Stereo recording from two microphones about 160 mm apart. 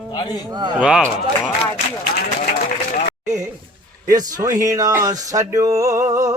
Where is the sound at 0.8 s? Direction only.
5° right (ahead or behind).